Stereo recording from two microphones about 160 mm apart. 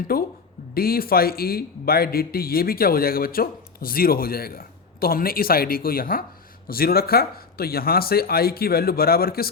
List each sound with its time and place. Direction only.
0.1 s a man's voice: 70° left (ahead or behind)